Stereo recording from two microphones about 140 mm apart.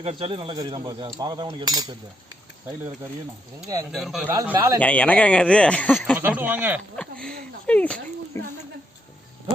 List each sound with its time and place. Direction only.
0.0 s speech: 45° right (ahead or behind); by 2.0 s 30° right (ahead or behind)
3.9 s speech: centre (ahead or behind)
4.3 s speech: 15° right (ahead or behind)
4.8 s speech: 10° left (ahead or behind)
6.1 s speech: 15° right (ahead or behind)
6.9 s speech: 5° left (ahead or behind)